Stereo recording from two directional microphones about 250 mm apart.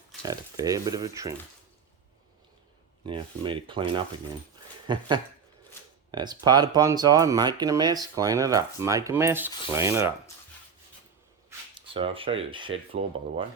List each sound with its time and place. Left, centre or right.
0.2 s speech: centre
3.1 s speech: centre
11.4 s speech: right